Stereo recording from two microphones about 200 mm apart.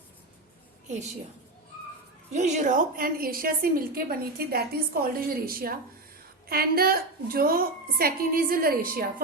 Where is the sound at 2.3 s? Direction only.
35° right (ahead or behind).